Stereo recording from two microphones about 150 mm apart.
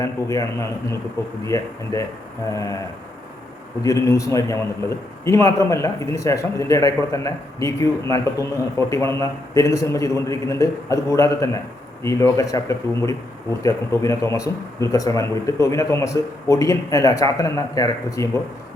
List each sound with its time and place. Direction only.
0.0 s speech: 20° left (ahead or behind)
3.8 s speech: 20° left (ahead or behind)